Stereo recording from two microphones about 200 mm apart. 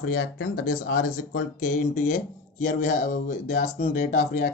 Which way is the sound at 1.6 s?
40° left (ahead or behind).